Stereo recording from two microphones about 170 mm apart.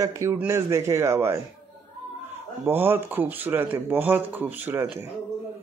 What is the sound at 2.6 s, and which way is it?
Speech, 15° right (ahead or behind).